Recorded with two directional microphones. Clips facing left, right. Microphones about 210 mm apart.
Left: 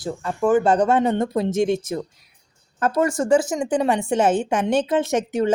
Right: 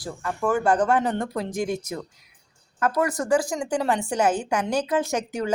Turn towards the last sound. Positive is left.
turn(degrees=25)  # may be behind; listen again after turning